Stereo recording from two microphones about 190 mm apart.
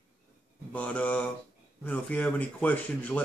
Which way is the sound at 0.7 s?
5° left (ahead or behind).